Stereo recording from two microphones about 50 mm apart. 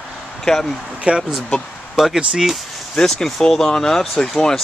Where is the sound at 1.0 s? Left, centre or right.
Centre.